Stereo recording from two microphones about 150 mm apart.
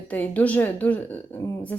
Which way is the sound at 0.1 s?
10° left (ahead or behind).